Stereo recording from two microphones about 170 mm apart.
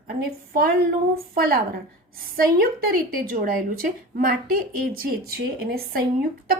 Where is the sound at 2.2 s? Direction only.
60° right (ahead or behind).